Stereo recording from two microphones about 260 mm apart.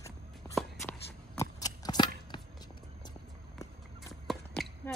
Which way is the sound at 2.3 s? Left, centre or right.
Centre.